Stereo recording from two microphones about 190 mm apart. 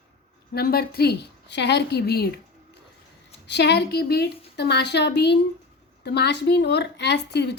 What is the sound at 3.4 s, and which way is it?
A woman's voice, 60° left (ahead or behind).